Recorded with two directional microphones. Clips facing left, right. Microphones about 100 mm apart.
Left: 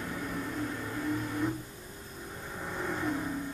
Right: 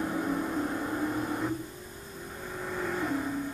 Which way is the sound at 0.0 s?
40° right (ahead or behind).